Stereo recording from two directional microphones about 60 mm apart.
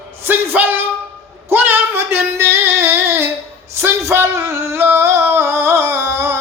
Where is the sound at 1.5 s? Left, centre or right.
Right.